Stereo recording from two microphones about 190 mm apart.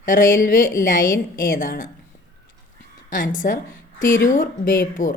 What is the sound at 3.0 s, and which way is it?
A woman's voice, 45° left (ahead or behind).